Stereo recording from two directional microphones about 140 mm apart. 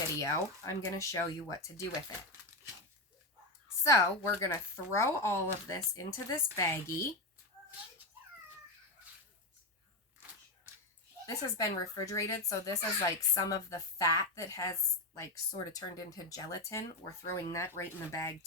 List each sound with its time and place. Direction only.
0.2 s speech: 20° left (ahead or behind)
3.8 s speech: 20° left (ahead or behind)
11.5 s speech: 25° left (ahead or behind)